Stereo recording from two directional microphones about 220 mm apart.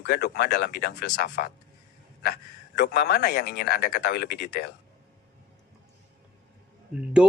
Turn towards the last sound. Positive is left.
turn(degrees=-5)  # may be behind; listen again after turning